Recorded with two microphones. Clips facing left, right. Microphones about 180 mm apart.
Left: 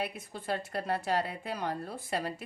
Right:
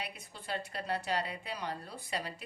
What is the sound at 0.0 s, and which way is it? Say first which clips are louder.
A woman's voice: left 8 dB; 55° left (ahead or behind).